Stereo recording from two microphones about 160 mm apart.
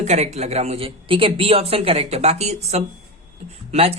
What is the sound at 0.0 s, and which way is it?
Speech, 45° right (ahead or behind).